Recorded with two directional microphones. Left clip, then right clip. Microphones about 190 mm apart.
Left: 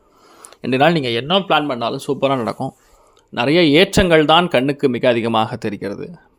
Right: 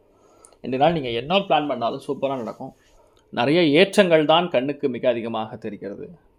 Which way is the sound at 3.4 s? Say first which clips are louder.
Left 4 dB; 15° left (ahead or behind).